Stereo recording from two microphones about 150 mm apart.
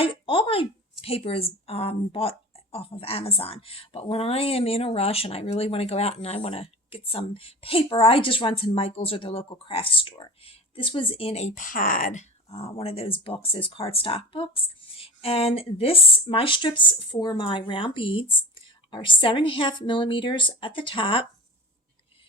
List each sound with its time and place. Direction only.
0.0 s a woman's voice: 35° left (ahead or behind)